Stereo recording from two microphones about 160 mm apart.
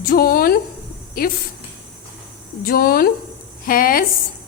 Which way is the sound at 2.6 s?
70° left (ahead or behind).